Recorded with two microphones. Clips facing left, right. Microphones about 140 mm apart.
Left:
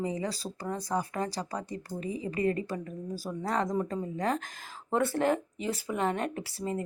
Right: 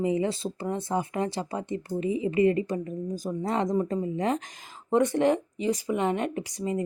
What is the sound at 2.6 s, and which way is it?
A woman's voice, 20° right (ahead or behind).